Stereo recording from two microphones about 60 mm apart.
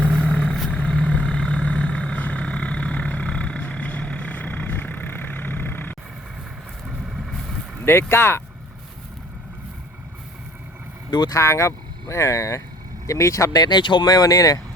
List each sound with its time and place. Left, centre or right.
0.3 s vehicle: centre; by 6.0 s left
7.9 s speech: left
11.3 s speech: left